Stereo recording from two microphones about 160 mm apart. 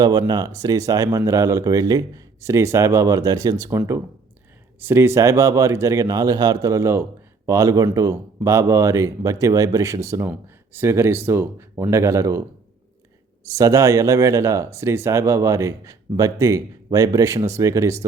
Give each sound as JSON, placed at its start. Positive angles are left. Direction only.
{"t": 0.0, "sound": "speech", "side_deg": -25}
{"t": 13.5, "sound": "speech", "side_deg": -20}